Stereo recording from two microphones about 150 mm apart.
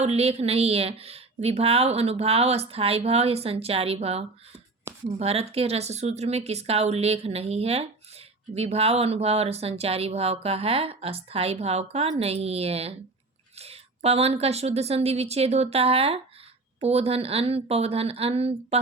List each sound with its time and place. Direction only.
0.0 s speech: 45° right (ahead or behind)